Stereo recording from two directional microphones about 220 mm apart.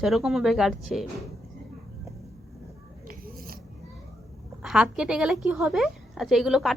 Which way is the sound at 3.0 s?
40° right (ahead or behind).